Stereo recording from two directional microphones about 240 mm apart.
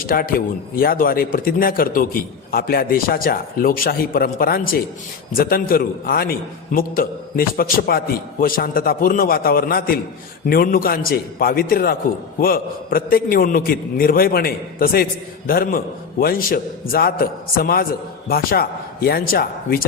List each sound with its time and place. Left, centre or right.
0.0 s speech: left